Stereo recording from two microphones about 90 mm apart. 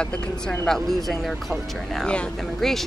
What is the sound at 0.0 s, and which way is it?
Speech, 10° left (ahead or behind).